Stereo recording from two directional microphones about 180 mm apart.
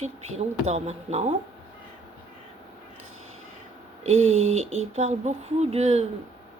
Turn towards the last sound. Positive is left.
turn(degrees=-35)  # may be behind; listen again after turning